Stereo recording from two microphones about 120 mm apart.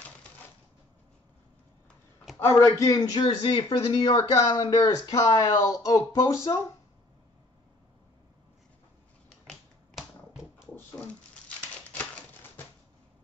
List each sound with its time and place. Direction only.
2.3 s a man's voice: 25° left (ahead or behind)
9.5 s finger snapping: 5° right (ahead or behind)
11.4 s a sound: 10° left (ahead or behind)